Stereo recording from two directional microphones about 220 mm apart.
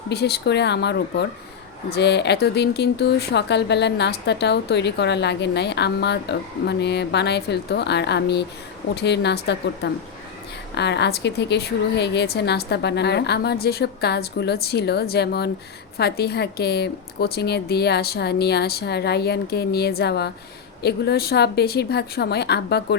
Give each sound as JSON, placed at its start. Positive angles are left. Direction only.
{"t": 0.1, "sound": "speech", "side_deg": 45}